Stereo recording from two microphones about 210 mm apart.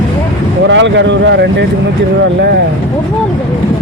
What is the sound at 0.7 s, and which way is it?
Speech, 60° right (ahead or behind).